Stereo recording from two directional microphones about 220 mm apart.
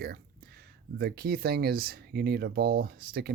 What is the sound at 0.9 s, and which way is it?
Speech, 45° right (ahead or behind).